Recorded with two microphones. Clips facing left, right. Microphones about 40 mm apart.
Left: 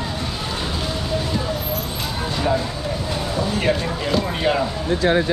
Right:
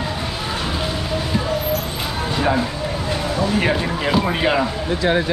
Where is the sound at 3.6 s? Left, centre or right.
Centre.